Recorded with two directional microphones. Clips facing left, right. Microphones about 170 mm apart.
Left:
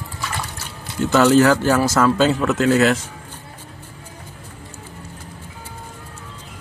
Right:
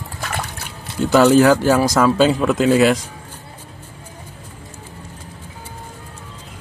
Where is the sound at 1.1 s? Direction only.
15° right (ahead or behind).